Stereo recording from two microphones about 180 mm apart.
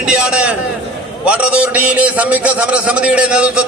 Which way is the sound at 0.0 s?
5° right (ahead or behind).